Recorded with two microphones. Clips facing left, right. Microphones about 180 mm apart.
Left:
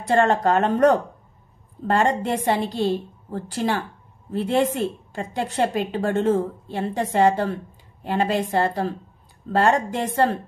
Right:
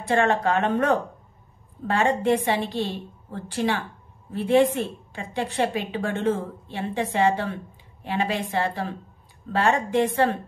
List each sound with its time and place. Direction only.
0.1 s a woman's voice: 40° left (ahead or behind)